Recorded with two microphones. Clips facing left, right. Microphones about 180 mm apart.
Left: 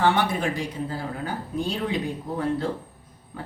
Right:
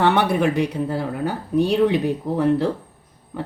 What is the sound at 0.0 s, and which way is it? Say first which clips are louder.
Speech: right 5 dB; 65° right (ahead or behind).